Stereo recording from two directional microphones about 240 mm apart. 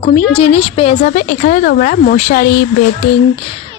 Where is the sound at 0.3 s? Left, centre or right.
Left.